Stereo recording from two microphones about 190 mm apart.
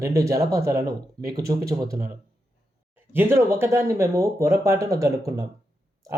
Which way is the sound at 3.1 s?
10° right (ahead or behind).